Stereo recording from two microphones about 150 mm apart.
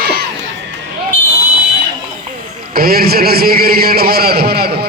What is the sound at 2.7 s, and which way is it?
A man's voice, 90° right.